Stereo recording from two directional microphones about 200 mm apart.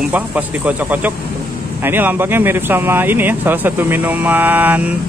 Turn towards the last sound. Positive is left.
turn(degrees=-10)  # may be behind; listen again after turning